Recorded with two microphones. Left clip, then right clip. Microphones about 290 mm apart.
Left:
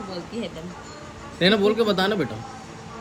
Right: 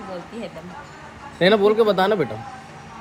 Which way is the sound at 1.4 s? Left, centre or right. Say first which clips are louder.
Right 4 dB; centre.